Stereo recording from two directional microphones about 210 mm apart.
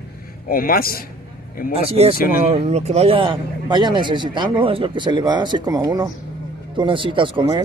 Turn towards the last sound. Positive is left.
turn(degrees=-20)  # may be behind; listen again after turning